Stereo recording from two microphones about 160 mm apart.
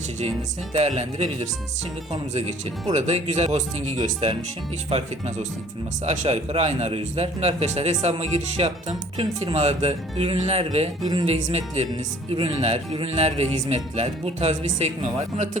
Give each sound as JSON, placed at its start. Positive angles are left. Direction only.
{"t": 0.7, "sound": "a man's voice", "side_deg": -40}
{"t": 4.9, "sound": "a man's voice", "side_deg": -40}